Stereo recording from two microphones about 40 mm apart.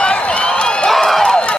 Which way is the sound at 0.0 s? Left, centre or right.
Left.